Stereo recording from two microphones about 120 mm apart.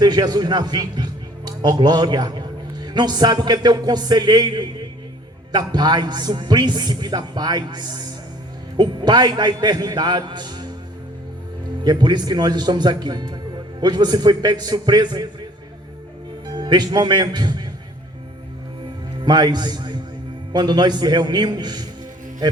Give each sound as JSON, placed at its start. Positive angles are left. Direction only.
{"t": 0.0, "sound": "a man's voice", "side_deg": -35}
{"t": 11.8, "sound": "a man's voice", "side_deg": -35}
{"t": 16.6, "sound": "a man's voice", "side_deg": -35}
{"t": 19.2, "sound": "a man's voice", "side_deg": -35}